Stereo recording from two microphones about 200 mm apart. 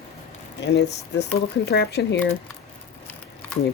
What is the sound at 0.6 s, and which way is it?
Speech, 60° left (ahead or behind).